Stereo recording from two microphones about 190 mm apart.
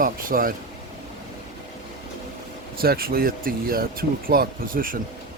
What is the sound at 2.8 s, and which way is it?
Speech, 50° right (ahead or behind).